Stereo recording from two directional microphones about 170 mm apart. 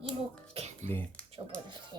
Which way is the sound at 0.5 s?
40° right (ahead or behind).